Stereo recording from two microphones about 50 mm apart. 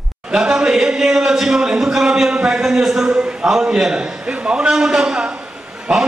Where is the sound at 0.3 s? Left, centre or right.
Centre.